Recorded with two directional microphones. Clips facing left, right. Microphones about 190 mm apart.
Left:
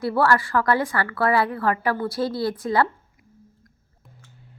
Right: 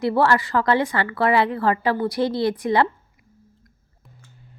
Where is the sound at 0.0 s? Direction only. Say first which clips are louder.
Right 2 dB; 20° right (ahead or behind).